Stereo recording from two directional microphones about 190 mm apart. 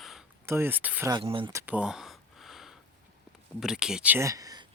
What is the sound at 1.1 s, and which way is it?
Speech, 25° right (ahead or behind).